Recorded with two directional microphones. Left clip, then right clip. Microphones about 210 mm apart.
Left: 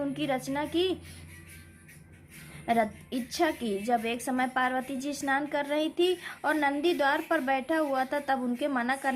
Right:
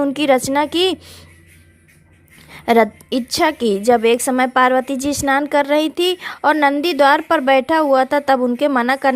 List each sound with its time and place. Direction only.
0.0 s a woman's voice: 50° right (ahead or behind)
2.6 s a woman's voice: 50° right (ahead or behind)